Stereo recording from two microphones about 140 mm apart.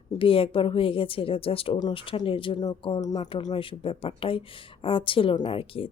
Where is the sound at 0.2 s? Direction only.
40° left (ahead or behind).